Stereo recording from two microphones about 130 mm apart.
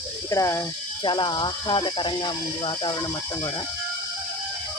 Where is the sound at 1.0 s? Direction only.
35° left (ahead or behind).